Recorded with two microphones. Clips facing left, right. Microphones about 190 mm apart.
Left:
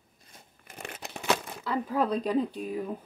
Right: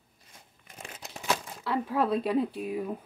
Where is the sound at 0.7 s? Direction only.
65° left (ahead or behind).